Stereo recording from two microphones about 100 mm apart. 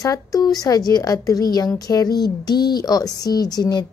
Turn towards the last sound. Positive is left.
turn(degrees=40)  # may be behind; listen again after turning